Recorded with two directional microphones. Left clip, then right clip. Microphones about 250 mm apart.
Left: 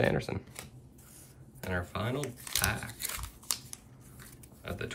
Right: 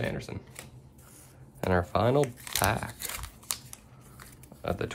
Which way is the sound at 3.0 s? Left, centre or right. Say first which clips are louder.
Right 1 dB; centre.